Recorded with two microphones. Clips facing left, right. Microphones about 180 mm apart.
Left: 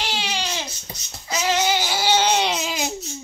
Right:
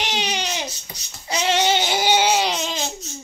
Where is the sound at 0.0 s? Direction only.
20° right (ahead or behind); by 2.9 s 5° left (ahead or behind).